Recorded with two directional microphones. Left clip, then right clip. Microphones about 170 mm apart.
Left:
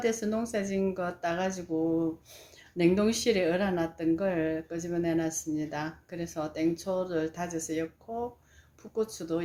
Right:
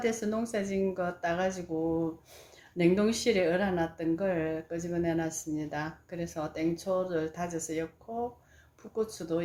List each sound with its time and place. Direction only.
0.0 s speech: 15° left (ahead or behind)
9.0 s speech: 15° left (ahead or behind)